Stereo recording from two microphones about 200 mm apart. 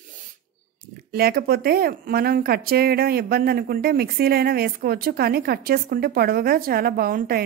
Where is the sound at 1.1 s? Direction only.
50° right (ahead or behind).